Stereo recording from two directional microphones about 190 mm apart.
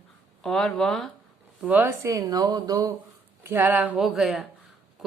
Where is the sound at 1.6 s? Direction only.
10° right (ahead or behind).